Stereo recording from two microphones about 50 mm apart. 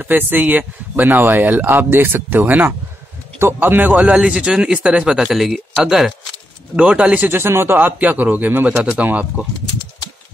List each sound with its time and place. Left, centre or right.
0.0 s speech: right
3.3 s speech: right
3.9 s speech: right
5.1 s speech: centre
6.8 s speech: right
7.2 s speech: right
8.6 s speech: right